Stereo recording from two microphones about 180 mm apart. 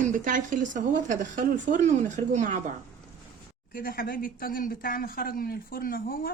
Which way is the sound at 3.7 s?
55° left (ahead or behind).